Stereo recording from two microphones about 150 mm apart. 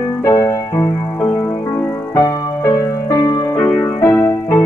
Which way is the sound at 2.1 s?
25° left (ahead or behind).